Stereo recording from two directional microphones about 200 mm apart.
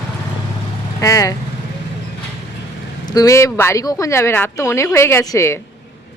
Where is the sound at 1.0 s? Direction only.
15° left (ahead or behind).